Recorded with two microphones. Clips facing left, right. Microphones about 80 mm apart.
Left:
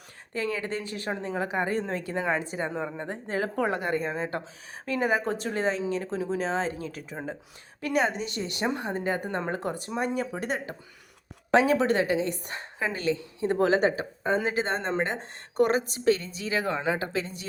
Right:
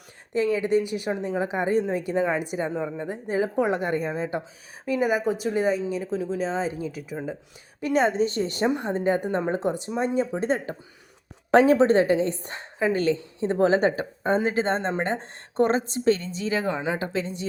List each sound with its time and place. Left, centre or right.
0.3 s speech: right
2.7 s speech: centre
3.1 s speech: centre
7.8 s a woman's voice: right
9.0 s a woman's voice: right
16.7 s speech: centre
17.1 s speech: right